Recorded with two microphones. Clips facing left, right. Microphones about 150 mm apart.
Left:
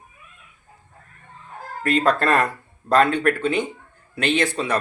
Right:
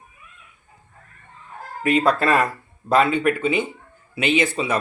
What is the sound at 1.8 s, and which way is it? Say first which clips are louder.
Speech: right 1 dB; 10° right (ahead or behind).